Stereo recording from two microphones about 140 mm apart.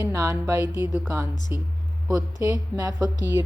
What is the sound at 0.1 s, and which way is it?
A woman's voice, 20° right (ahead or behind).